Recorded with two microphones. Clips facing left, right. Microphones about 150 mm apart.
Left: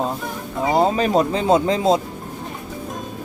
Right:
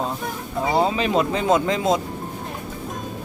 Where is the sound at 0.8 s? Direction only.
40° left (ahead or behind).